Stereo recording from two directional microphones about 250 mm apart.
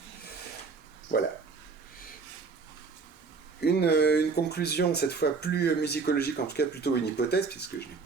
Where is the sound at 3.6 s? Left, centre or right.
Left.